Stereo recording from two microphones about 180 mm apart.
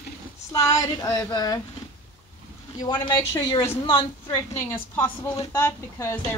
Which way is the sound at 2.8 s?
25° left (ahead or behind).